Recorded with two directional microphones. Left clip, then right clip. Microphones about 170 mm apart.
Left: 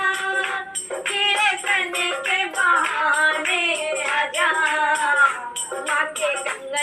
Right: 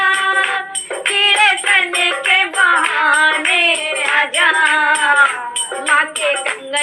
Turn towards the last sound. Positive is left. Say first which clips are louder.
# right 6 dB
turn(degrees=-25)  # may be behind; listen again after turning